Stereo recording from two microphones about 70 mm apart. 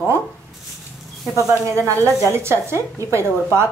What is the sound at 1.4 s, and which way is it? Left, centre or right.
Speech, right.